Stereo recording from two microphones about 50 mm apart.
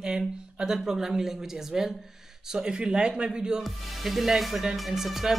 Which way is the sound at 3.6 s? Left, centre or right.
Centre.